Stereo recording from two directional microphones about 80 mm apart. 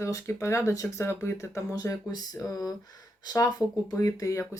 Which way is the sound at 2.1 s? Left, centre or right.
Left.